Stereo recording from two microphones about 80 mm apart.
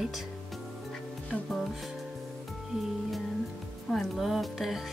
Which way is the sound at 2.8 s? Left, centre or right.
Centre.